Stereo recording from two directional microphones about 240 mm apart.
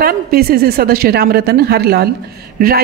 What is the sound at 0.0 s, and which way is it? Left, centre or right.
A woman's voice, right.